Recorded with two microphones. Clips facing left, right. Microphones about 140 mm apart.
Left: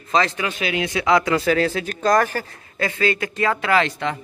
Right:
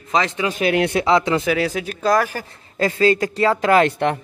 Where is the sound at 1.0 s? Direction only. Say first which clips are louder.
Right 1 dB; 25° right (ahead or behind).